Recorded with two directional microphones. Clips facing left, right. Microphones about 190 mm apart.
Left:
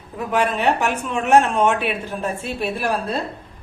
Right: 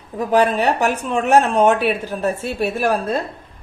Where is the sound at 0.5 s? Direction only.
40° right (ahead or behind).